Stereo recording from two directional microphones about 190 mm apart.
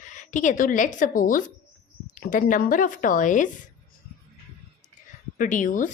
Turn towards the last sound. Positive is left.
turn(degrees=40)  # may be behind; listen again after turning